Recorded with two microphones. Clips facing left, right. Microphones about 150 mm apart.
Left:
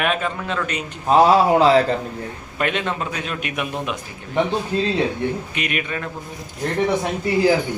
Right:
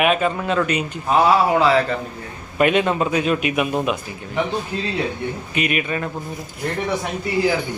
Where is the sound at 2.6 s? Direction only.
10° right (ahead or behind).